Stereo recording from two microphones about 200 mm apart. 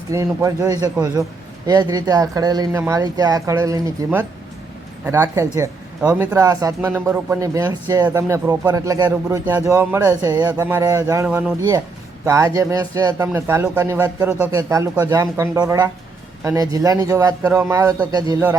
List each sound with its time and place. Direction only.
0.1 s speech: 15° right (ahead or behind)